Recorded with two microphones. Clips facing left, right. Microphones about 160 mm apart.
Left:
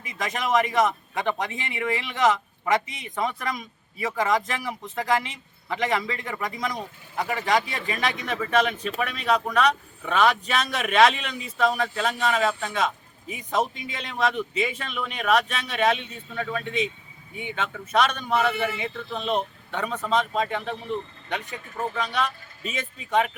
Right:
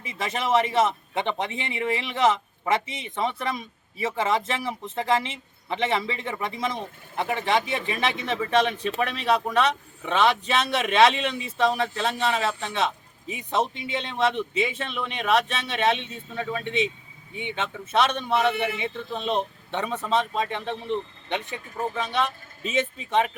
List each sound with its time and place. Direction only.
0.0 s speech: 30° right (ahead or behind)
21.9 s speech: 25° right (ahead or behind)